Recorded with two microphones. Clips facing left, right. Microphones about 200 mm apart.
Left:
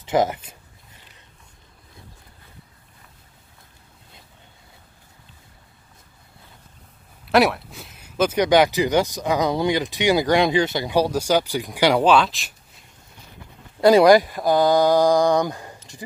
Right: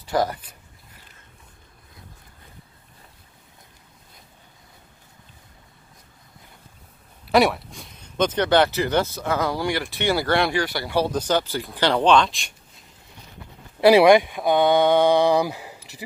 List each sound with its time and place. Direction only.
0.0 s speech: 20° left (ahead or behind)
7.2 s speech: centre (ahead or behind)
13.8 s speech: 5° right (ahead or behind)